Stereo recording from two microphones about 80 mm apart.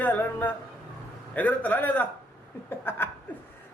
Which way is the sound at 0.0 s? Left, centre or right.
Left.